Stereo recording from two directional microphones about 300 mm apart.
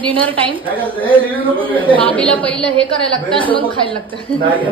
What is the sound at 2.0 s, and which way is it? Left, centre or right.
Speech, centre.